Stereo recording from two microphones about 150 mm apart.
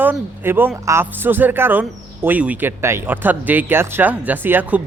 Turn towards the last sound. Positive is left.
turn(degrees=-10)  # may be behind; listen again after turning